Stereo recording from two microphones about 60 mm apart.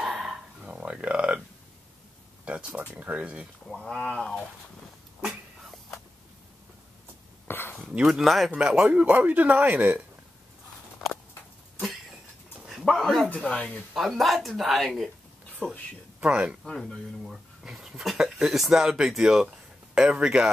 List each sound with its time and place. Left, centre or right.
0.1 s bow-wow: centre
0.6 s a sound: right
2.4 s speech: right
3.6 s speech: centre
5.2 s a sound: centre
7.4 s a sound: left
8.1 s speech: centre
8.5 s speech: centre
13.0 s speech: centre
13.3 s speech: left
13.9 s speech: centre
16.2 s speech: centre
16.6 s speech: centre
17.3 s speech: centre